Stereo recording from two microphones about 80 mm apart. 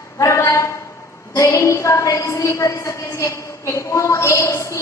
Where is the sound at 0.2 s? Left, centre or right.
Left.